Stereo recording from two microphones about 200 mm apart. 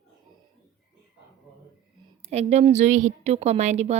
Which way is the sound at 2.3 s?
35° right (ahead or behind).